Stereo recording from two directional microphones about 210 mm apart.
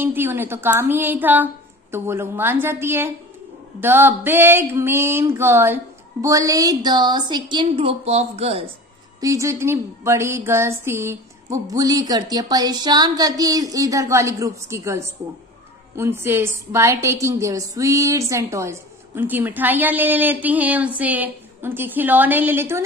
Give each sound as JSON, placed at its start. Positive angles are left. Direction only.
{"t": 0.0, "sound": "a woman's voice", "side_deg": -10}
{"t": 9.2, "sound": "speech", "side_deg": -15}